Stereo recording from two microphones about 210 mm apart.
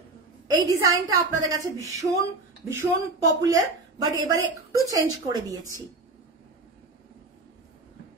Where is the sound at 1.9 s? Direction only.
15° right (ahead or behind).